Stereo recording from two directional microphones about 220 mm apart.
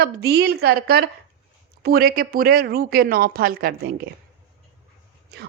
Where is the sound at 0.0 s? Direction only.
45° right (ahead or behind).